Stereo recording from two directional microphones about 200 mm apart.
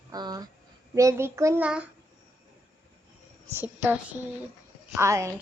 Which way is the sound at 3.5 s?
10° right (ahead or behind).